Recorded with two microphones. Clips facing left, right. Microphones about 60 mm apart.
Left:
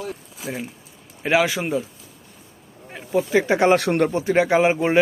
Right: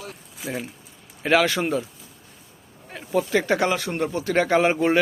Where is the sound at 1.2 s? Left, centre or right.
Centre.